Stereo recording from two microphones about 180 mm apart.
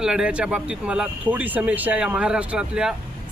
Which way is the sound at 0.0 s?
5° right (ahead or behind).